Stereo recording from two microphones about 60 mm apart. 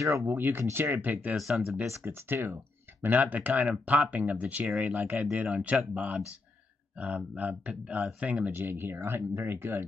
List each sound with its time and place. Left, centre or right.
0.3 s speech: right
1.3 s speech: centre
1.9 s speech: right
3.0 s speech: right
8.6 s speech: right